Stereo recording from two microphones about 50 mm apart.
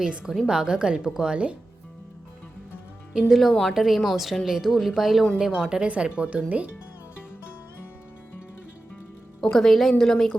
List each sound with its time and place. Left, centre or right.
0.0 s a woman's voice: right
3.1 s a woman's voice: centre; by 6.7 s right
9.4 s a woman's voice: centre